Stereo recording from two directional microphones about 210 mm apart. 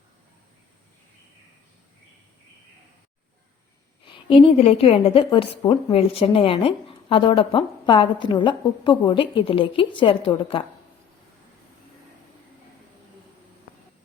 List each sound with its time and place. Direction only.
4.0 s a woman's voice: 25° left (ahead or behind)